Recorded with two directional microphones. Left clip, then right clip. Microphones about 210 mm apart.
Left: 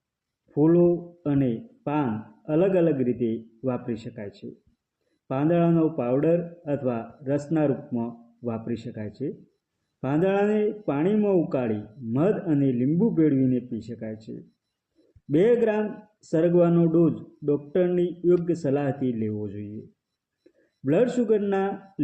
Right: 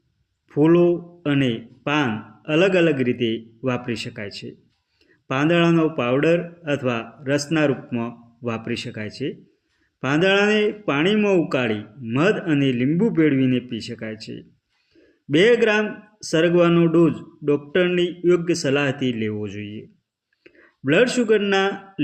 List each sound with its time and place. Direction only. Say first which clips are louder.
0.5 s speech: right 4 dB; 35° right (ahead or behind)
15.4 s speech: right 5 dB; 30° right (ahead or behind)
20.8 s speech: right 5 dB; 35° right (ahead or behind)